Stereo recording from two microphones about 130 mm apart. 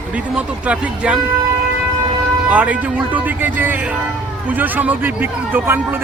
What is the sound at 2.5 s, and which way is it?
Speech, 10° right (ahead or behind).